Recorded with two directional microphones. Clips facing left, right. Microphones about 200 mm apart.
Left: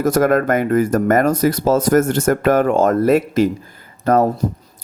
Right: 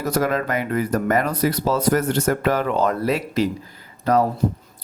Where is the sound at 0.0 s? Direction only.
50° left (ahead or behind).